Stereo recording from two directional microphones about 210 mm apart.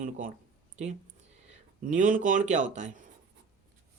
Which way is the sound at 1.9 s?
40° right (ahead or behind).